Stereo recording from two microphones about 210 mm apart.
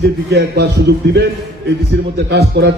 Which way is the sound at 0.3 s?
50° right (ahead or behind).